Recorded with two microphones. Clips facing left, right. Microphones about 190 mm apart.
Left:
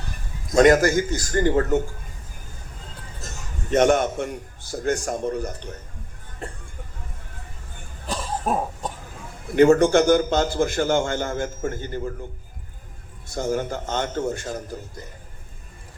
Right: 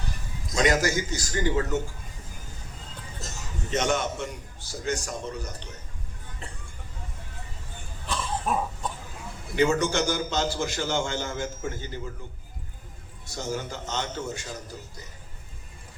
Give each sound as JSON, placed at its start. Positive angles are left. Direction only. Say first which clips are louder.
{"t": 0.4, "sound": "a man's voice", "louder": "left 8 dB", "side_deg": 55}
{"t": 3.2, "sound": "a man's voice", "louder": "even", "side_deg": 55}
{"t": 8.0, "sound": "cough", "louder": "left 3 dB", "side_deg": 40}
{"t": 9.6, "sound": "a man's voice", "louder": "left 9 dB", "side_deg": 55}
{"t": 13.2, "sound": "a man's voice", "louder": "left 7 dB", "side_deg": 55}